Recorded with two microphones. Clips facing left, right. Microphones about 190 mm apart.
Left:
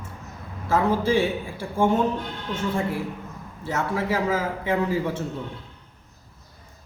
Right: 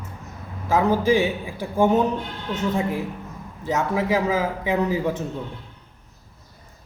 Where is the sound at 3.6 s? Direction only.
15° right (ahead or behind).